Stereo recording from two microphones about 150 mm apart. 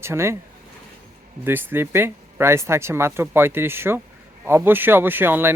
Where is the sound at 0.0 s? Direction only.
15° right (ahead or behind).